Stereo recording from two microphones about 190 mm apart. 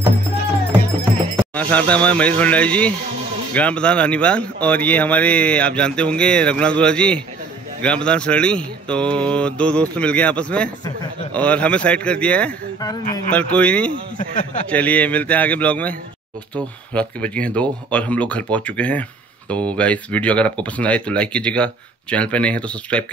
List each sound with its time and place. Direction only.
1.5 s speech: 5° left (ahead or behind)
14.1 s speech: 40° left (ahead or behind)
14.7 s speech: 5° left (ahead or behind)